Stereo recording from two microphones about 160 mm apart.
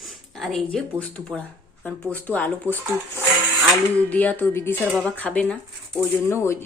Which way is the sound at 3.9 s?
10° left (ahead or behind).